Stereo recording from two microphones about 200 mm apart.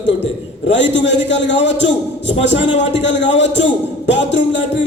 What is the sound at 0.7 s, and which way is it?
A man's voice, 65° left (ahead or behind).